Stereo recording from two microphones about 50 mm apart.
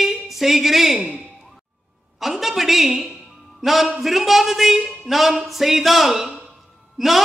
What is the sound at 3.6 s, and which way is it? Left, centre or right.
A man's voice, centre.